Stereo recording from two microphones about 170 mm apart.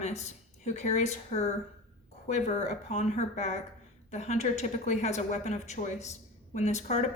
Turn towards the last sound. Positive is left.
turn(degrees=40)  # may be behind; listen again after turning